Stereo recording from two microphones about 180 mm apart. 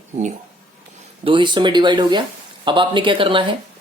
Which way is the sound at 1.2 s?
25° right (ahead or behind).